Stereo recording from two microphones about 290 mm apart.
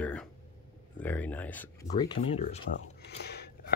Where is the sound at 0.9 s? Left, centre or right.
Centre.